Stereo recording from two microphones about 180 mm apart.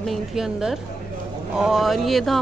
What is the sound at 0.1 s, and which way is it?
A woman's voice, centre (ahead or behind).